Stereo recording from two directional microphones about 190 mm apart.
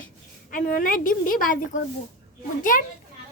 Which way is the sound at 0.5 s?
45° left (ahead or behind).